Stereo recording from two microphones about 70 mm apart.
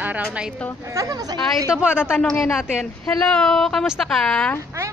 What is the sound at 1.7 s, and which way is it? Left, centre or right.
Speech, centre.